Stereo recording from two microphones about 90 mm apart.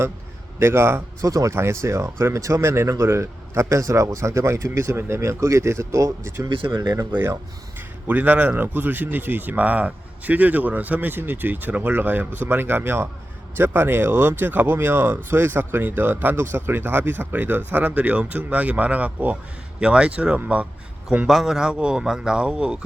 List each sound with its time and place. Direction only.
0.6 s speech: 30° right (ahead or behind)
6.5 s speech: 70° right (ahead or behind)
7.1 s speech: 20° right (ahead or behind)
21.2 s speech: 5° right (ahead or behind)